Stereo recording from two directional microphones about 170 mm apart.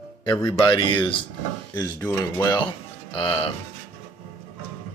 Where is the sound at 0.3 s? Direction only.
25° left (ahead or behind).